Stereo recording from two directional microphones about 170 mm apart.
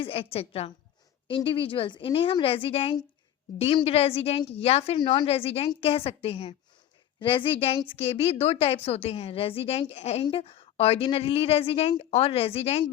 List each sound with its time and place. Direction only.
0.0 s a woman's voice: 35° left (ahead or behind)